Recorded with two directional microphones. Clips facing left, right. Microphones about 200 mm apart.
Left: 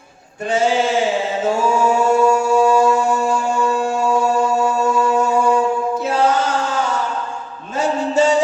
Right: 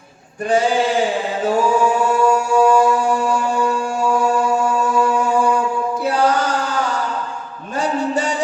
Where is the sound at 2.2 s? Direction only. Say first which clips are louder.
Left 1 dB; 25° left (ahead or behind).